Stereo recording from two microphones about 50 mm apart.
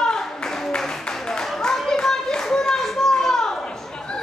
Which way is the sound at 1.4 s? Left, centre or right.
Centre.